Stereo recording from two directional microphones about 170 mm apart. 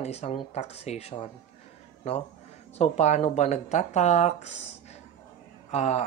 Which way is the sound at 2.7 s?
40° left (ahead or behind).